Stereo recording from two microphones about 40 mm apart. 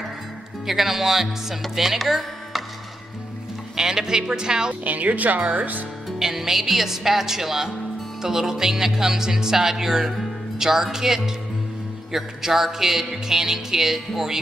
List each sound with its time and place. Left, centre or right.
0.7 s speech: centre
3.7 s speech: centre
4.8 s speech: right
6.1 s speech: centre